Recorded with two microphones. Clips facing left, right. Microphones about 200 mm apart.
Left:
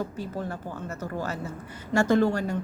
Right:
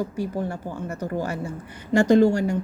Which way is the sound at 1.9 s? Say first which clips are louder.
Right 5 dB; 15° right (ahead or behind).